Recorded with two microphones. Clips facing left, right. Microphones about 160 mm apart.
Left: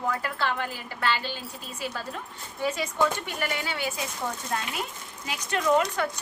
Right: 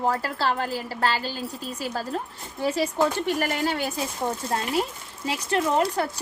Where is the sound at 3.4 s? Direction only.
40° right (ahead or behind).